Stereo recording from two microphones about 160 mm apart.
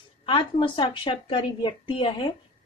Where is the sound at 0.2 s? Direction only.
30° left (ahead or behind).